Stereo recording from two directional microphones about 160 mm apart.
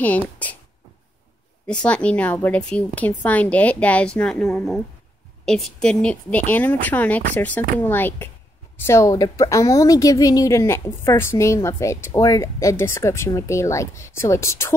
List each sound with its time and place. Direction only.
1.7 s a woman's voice: 5° left (ahead or behind)